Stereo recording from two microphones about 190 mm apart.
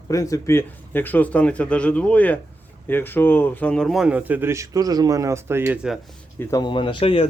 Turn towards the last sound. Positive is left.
turn(degrees=30)  # may be behind; listen again after turning